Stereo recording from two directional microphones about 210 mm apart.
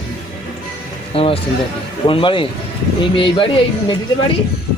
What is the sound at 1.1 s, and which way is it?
Speech, 25° left (ahead or behind).